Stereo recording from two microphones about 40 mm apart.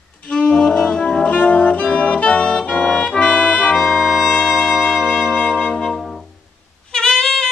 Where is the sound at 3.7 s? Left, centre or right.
Centre.